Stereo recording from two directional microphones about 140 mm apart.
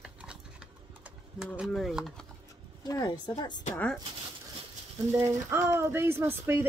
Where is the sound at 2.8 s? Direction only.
25° left (ahead or behind).